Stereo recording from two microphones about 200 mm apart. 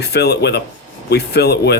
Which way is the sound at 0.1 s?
55° left (ahead or behind).